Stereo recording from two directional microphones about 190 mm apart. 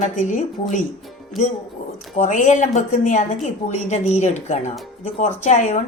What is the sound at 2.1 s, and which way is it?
A woman's voice, 40° left (ahead or behind).